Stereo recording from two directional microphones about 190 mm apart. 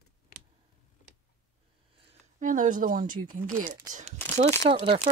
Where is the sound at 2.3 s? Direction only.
45° right (ahead or behind).